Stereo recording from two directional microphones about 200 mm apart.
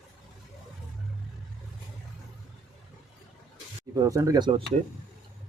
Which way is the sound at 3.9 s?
15° right (ahead or behind).